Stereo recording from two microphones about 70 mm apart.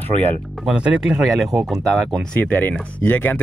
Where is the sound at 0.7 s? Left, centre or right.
Centre.